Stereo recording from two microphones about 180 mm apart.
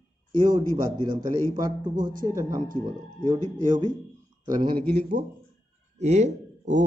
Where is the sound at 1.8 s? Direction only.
50° right (ahead or behind).